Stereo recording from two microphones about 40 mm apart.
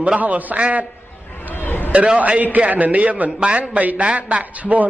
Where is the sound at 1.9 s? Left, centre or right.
Right.